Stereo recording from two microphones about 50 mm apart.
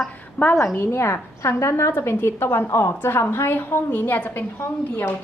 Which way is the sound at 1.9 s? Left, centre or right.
Left.